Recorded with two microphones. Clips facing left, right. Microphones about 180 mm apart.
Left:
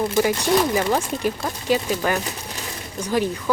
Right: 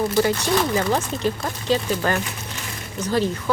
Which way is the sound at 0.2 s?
10° left (ahead or behind).